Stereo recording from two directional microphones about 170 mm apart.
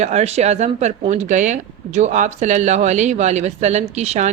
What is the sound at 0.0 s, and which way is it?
Speech, 40° right (ahead or behind).